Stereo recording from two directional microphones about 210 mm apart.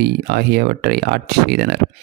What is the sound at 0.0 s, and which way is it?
Speech, 50° right (ahead or behind).